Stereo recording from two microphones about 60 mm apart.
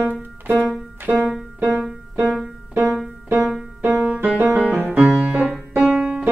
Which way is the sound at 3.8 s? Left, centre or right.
Right.